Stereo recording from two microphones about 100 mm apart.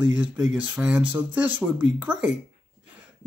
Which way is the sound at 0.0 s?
15° right (ahead or behind).